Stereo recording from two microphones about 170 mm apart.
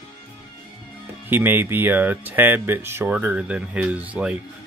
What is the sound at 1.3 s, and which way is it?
Speech, 10° right (ahead or behind).